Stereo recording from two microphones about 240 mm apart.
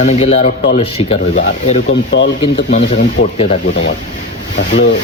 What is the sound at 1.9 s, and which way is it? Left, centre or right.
Speech, left.